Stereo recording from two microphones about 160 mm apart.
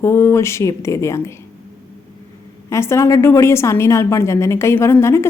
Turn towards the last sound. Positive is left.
turn(degrees=15)  # may be behind; listen again after turning